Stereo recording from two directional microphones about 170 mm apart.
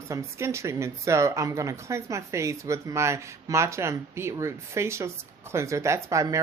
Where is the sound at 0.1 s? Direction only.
15° right (ahead or behind).